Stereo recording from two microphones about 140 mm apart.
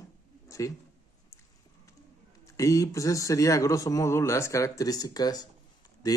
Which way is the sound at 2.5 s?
25° left (ahead or behind).